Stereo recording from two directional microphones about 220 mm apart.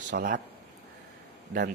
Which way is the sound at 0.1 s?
35° right (ahead or behind).